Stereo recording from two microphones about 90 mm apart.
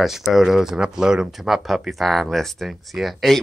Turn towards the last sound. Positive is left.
turn(degrees=0)  # may be behind; listen again after turning